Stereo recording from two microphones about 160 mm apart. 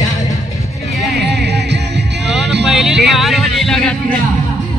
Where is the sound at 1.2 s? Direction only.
90° right.